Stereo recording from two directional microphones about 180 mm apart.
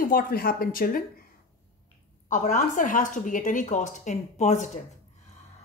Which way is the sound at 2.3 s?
45° left (ahead or behind).